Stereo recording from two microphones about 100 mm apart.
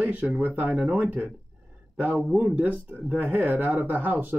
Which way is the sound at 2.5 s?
15° right (ahead or behind).